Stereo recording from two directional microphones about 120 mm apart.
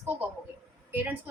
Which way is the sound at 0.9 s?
15° right (ahead or behind).